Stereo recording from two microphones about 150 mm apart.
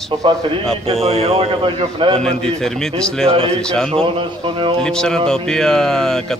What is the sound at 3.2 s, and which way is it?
Speech, 40° right (ahead or behind).